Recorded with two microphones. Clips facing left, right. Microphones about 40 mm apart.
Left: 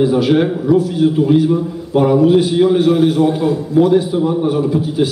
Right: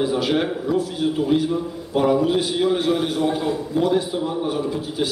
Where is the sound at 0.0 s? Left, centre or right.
Centre.